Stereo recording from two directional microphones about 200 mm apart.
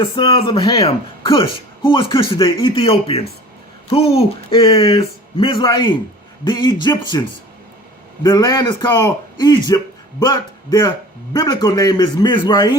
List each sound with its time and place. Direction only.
0.0 s speech: 25° left (ahead or behind)
8.2 s speech: 20° left (ahead or behind)